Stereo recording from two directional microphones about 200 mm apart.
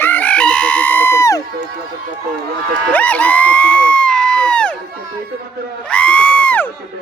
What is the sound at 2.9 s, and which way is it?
Crowd, 5° left (ahead or behind).